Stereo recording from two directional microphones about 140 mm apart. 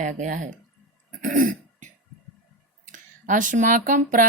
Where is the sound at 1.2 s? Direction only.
75° right (ahead or behind).